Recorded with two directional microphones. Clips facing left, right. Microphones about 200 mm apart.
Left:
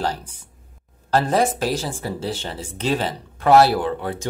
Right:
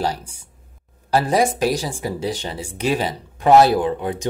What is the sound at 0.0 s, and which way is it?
Speech, 10° right (ahead or behind).